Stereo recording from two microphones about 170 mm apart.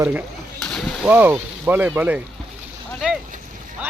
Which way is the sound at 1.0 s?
10° right (ahead or behind).